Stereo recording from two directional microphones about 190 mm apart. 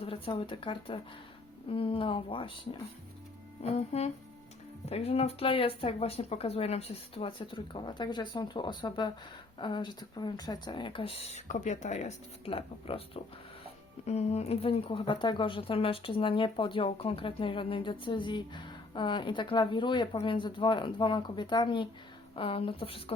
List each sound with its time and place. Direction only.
0.0 s speech: 30° left (ahead or behind)
3.6 s speech: 35° left (ahead or behind)